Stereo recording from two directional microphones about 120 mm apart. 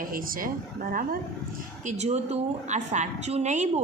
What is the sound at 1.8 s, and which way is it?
A woman's voice, 70° right (ahead or behind).